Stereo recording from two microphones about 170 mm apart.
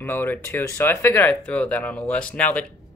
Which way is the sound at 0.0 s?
15° left (ahead or behind).